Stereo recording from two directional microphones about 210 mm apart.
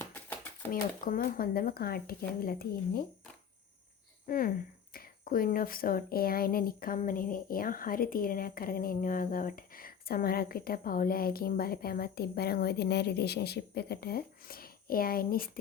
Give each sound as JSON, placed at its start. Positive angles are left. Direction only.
{"t": 0.0, "sound": "a sound", "side_deg": 10}
{"t": 0.7, "sound": "speech", "side_deg": 40}
{"t": 4.3, "sound": "speech", "side_deg": 40}